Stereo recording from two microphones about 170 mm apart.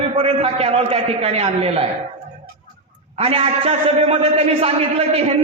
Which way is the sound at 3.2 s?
35° right (ahead or behind).